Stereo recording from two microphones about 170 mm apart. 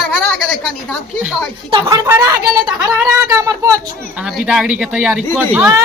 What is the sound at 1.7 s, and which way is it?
Speech, 20° right (ahead or behind).